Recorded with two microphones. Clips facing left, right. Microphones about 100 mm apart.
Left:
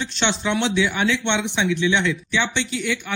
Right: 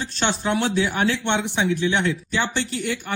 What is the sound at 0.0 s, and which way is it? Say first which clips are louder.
Speech: left 1 dB; 40° right (ahead or behind).